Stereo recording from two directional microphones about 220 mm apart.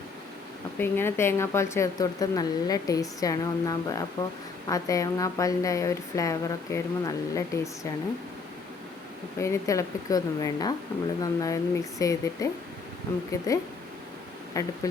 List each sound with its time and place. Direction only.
0.8 s speech: 10° left (ahead or behind)
9.4 s speech: 15° left (ahead or behind)